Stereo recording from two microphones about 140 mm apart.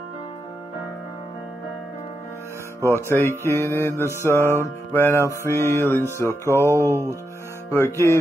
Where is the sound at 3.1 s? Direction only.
15° left (ahead or behind).